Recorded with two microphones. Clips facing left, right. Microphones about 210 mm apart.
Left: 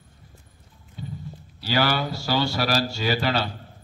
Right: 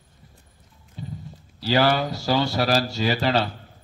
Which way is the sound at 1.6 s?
30° right (ahead or behind).